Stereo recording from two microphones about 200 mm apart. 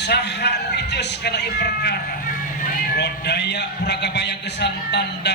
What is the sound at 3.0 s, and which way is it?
A man's voice, 55° left (ahead or behind).